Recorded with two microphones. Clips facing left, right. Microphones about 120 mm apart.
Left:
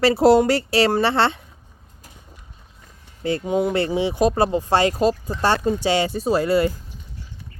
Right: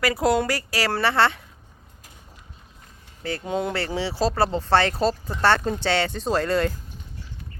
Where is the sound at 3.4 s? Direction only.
10° left (ahead or behind).